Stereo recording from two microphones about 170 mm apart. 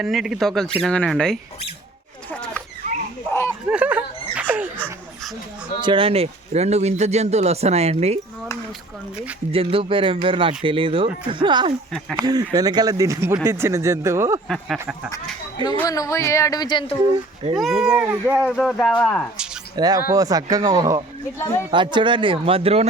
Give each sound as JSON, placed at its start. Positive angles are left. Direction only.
{"t": 0.0, "sound": "speech", "side_deg": 0}
{"t": 2.3, "sound": "a sound", "side_deg": 5}
{"t": 3.7, "sound": "a sound", "side_deg": -10}
{"t": 5.8, "sound": "speech", "side_deg": -30}
{"t": 9.5, "sound": "speech", "side_deg": -35}
{"t": 11.9, "sound": "speech", "side_deg": 0}
{"t": 12.2, "sound": "speech", "side_deg": -25}
{"t": 14.4, "sound": "speech", "side_deg": 5}
{"t": 15.1, "sound": "speech", "side_deg": 25}
{"t": 17.5, "sound": "speech", "side_deg": 0}
{"t": 18.5, "sound": "speech", "side_deg": 5}
{"t": 19.7, "sound": "speech", "side_deg": -25}